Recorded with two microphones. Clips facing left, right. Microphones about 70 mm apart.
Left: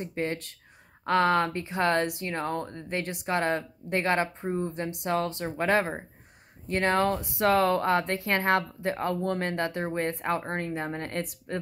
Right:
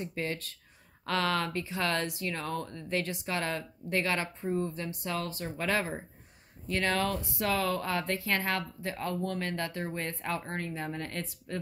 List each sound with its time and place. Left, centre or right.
0.0 s speech: left
4.7 s speech: left
7.2 s speech: left
7.5 s speech: left